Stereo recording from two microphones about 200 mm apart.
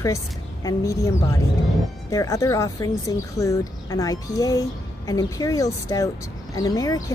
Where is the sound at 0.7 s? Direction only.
15° left (ahead or behind).